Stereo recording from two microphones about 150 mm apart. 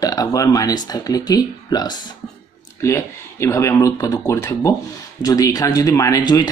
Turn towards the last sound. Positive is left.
turn(degrees=25)  # may be behind; listen again after turning